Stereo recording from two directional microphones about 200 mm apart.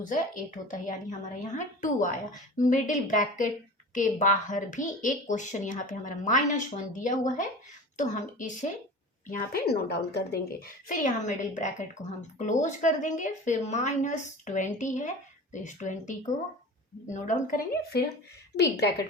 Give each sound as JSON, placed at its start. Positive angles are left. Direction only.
{"t": 0.0, "sound": "a woman's voice", "side_deg": 40}
{"t": 18.5, "sound": "a woman's voice", "side_deg": 55}